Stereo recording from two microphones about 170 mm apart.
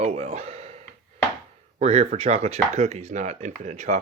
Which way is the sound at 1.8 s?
40° right (ahead or behind).